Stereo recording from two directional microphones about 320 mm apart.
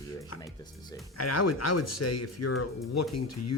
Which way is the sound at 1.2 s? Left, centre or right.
Left.